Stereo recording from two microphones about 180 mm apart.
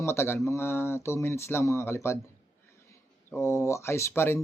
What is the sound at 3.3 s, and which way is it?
A man's voice, 15° left (ahead or behind).